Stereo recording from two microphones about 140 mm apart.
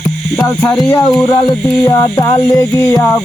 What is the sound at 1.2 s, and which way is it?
Music, 30° left (ahead or behind).